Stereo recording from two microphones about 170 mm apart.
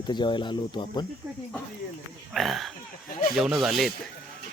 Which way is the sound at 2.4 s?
Centre (ahead or behind).